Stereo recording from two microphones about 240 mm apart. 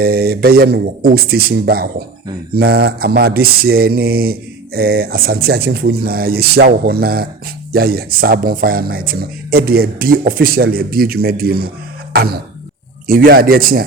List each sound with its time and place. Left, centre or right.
0.0 s mantra: right
12.1 s a sound: right
13.1 s mantra: right